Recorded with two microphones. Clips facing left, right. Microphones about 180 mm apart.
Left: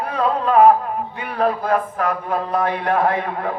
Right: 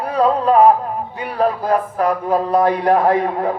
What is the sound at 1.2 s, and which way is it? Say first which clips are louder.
Speech: right 2 dB; 35° right (ahead or behind).